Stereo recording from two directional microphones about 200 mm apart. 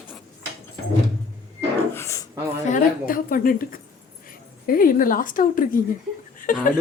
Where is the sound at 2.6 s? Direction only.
40° left (ahead or behind).